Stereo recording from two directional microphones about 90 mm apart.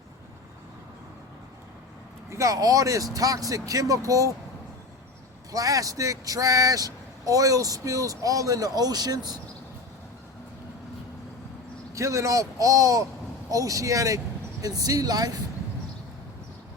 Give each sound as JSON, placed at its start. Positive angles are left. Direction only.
{"t": 2.3, "sound": "speech", "side_deg": -35}
{"t": 5.5, "sound": "speech", "side_deg": -40}
{"t": 11.9, "sound": "speech", "side_deg": -35}